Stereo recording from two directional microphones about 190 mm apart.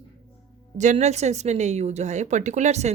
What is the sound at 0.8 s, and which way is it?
Speech, 40° right (ahead or behind).